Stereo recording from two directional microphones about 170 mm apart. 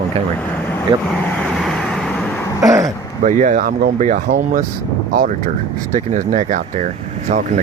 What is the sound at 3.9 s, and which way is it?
Speech, 45° right (ahead or behind).